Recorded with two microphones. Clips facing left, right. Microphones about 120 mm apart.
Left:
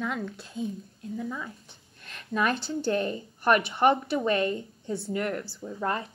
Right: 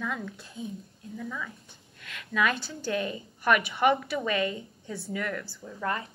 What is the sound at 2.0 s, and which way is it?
Speech, 35° left (ahead or behind).